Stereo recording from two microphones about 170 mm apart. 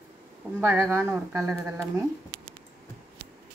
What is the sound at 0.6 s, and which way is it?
Speech, 15° right (ahead or behind).